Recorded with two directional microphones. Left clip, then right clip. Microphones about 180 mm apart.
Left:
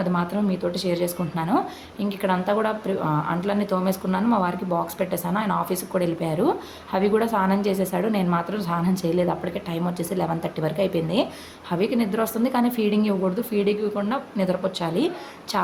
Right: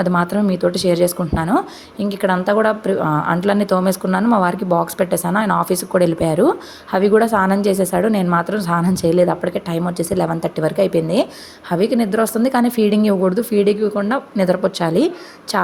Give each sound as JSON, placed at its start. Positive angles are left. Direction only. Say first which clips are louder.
{"t": 0.0, "sound": "speech", "louder": "right 8 dB", "side_deg": -40}